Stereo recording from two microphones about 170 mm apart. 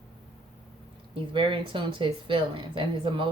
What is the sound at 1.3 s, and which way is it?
Speech, 30° right (ahead or behind).